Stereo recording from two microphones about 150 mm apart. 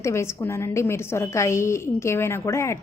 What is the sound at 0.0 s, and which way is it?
A woman's voice, 20° left (ahead or behind).